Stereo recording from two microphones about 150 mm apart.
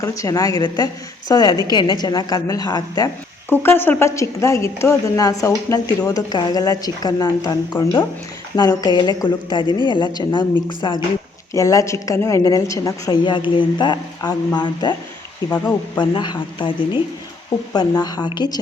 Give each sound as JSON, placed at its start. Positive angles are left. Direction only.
{"t": 0.0, "sound": "a woman's voice", "side_deg": 20}
{"t": 3.5, "sound": "a woman's voice", "side_deg": 15}
{"t": 7.7, "sound": "speech", "side_deg": 15}
{"t": 8.5, "sound": "a woman's voice", "side_deg": 25}
{"t": 11.5, "sound": "a woman's voice", "side_deg": 20}
{"t": 16.0, "sound": "a woman's voice", "side_deg": 30}